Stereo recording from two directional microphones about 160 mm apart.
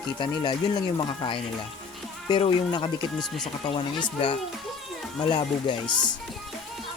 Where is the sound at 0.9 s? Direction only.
30° left (ahead or behind).